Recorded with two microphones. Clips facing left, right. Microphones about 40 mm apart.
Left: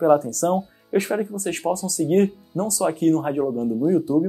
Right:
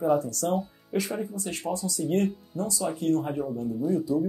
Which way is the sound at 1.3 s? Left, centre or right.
Left.